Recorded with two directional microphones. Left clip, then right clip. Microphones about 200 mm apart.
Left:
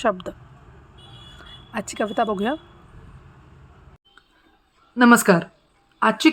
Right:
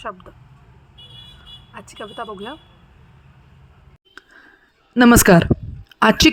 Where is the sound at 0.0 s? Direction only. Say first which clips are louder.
Left 9 dB; 25° left (ahead or behind).